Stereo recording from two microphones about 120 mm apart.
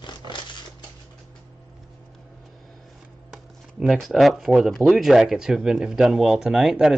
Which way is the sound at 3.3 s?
Centre (ahead or behind).